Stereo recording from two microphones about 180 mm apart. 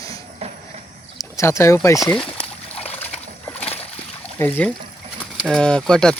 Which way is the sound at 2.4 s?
10° left (ahead or behind).